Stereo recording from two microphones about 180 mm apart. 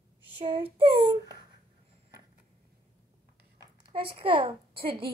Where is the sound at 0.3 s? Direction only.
30° right (ahead or behind).